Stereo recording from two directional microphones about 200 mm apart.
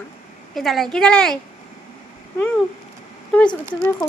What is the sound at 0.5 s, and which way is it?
Speech, centre (ahead or behind).